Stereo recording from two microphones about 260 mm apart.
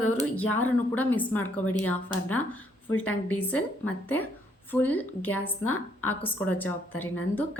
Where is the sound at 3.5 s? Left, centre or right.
Centre.